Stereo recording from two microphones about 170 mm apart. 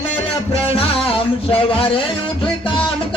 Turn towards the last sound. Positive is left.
turn(degrees=35)  # may be behind; listen again after turning